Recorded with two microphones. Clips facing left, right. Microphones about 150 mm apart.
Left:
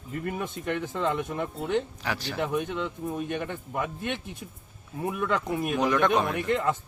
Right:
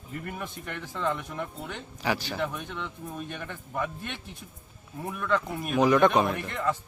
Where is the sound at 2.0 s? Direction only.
Centre (ahead or behind).